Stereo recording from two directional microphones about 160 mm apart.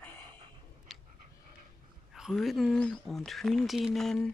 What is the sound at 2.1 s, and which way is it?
Speech, centre (ahead or behind).